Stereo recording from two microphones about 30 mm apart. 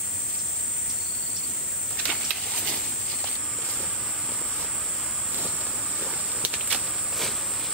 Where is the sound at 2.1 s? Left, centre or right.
Centre.